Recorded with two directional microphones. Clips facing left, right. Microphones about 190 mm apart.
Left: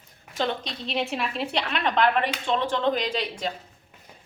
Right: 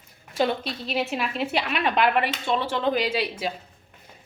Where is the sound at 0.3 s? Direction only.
10° right (ahead or behind).